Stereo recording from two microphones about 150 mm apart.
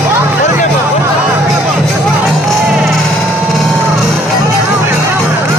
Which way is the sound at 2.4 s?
Centre (ahead or behind).